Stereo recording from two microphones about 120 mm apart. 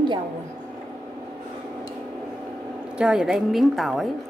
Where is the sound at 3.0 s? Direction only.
5° right (ahead or behind).